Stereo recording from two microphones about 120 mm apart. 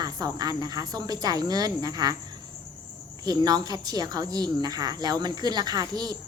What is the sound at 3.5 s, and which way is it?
A woman's voice, 35° right (ahead or behind).